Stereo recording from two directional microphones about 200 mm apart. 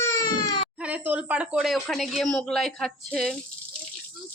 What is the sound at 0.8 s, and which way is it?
A woman's voice, 5° right (ahead or behind).